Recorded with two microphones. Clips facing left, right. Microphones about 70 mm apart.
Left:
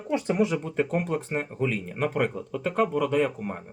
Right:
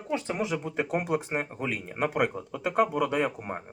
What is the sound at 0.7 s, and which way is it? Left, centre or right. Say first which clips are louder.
Speech: left 2 dB; centre.